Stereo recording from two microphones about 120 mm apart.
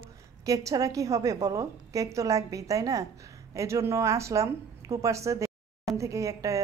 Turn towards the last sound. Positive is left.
turn(degrees=-25)  # may be behind; listen again after turning